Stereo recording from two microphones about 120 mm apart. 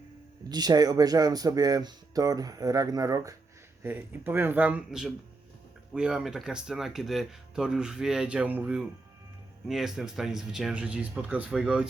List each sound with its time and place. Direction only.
0.4 s speech: 35° right (ahead or behind)
3.8 s speech: 15° right (ahead or behind)